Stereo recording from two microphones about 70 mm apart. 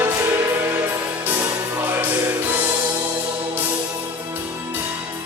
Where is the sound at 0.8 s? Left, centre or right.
Right.